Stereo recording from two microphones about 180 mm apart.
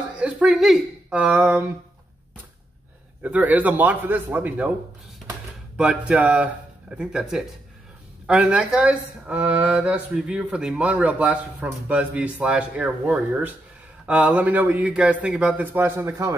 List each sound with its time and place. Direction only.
0.2 s speech: 5° right (ahead or behind)
3.2 s speech: 10° right (ahead or behind)
5.8 s speech: 5° right (ahead or behind)